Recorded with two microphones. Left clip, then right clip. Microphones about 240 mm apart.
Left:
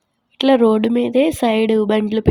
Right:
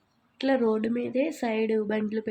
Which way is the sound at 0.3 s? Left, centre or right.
Left.